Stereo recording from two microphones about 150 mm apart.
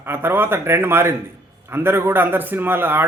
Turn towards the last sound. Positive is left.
turn(degrees=-15)  # may be behind; listen again after turning